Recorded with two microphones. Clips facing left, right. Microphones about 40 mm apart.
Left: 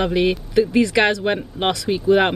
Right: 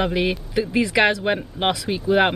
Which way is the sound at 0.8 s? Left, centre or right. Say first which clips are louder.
Left 2 dB; centre.